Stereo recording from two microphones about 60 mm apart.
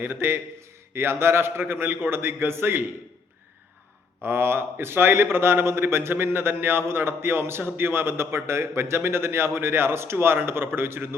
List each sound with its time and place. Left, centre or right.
0.0 s a man's voice: right
4.2 s a man's voice: right